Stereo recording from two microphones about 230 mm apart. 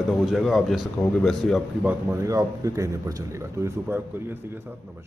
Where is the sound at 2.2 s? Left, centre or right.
Centre.